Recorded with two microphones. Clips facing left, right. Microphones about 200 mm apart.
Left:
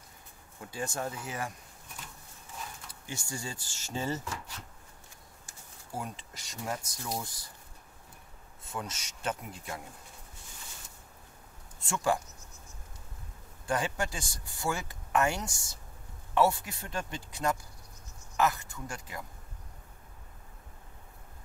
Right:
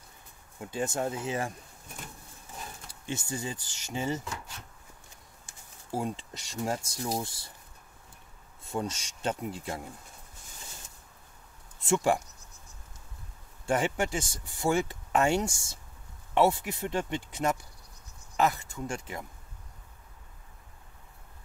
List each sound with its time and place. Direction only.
0.7 s speech: 25° right (ahead or behind)
2.9 s speech: 25° right (ahead or behind)
5.9 s speech: 25° right (ahead or behind)
8.7 s speech: 30° right (ahead or behind)
11.8 s speech: 25° right (ahead or behind)
13.7 s speech: 25° right (ahead or behind)